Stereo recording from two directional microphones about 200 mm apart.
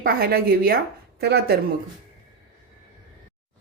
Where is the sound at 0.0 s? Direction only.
50° right (ahead or behind).